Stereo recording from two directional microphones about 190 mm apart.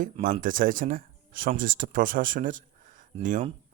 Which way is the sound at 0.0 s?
45° right (ahead or behind).